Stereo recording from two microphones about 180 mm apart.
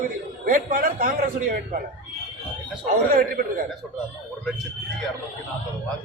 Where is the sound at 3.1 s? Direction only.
55° right (ahead or behind).